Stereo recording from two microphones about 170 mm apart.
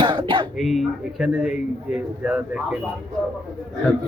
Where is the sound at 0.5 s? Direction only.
Centre (ahead or behind).